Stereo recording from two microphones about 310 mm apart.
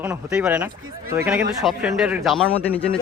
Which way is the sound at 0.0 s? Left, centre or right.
Centre.